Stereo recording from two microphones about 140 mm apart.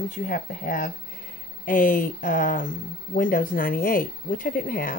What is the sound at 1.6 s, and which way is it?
Speech, 75° left (ahead or behind).